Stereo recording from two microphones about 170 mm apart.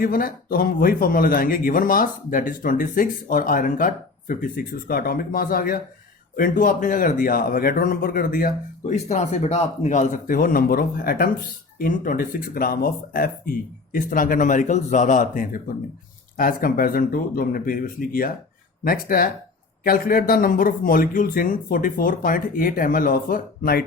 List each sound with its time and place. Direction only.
0.0 s speech: 55° left (ahead or behind)
9.0 s speech: 40° left (ahead or behind); by 23.8 s 60° left (ahead or behind)